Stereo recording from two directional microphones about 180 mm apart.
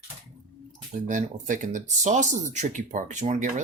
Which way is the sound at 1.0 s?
45° right (ahead or behind).